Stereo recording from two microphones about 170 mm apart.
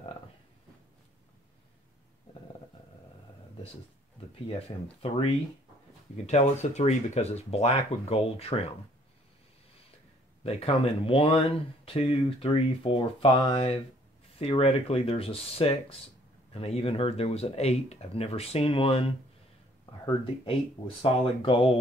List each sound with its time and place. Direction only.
4.5 s speech: 35° left (ahead or behind)
10.4 s speech: 35° left (ahead or behind)